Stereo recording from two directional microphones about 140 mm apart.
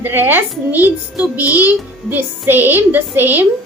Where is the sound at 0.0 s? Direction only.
15° right (ahead or behind).